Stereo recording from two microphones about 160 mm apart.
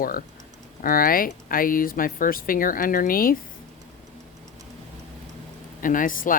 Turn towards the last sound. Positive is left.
turn(degrees=60)  # may be behind; listen again after turning